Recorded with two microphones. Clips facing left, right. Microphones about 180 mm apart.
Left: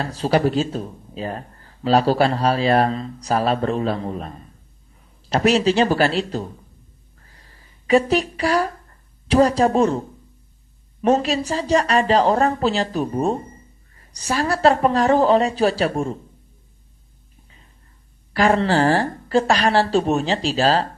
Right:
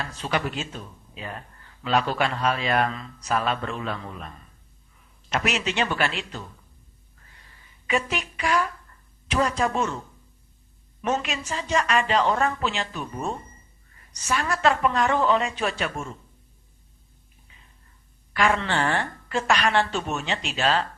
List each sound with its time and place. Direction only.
0.0 s speech: 35° left (ahead or behind)
7.2 s a sound: 35° left (ahead or behind)
11.0 s speech: 35° left (ahead or behind)
18.3 s speech: 35° left (ahead or behind)